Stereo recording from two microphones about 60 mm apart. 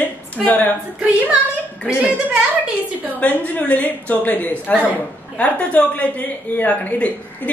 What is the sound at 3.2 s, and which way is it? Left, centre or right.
A woman's voice, left.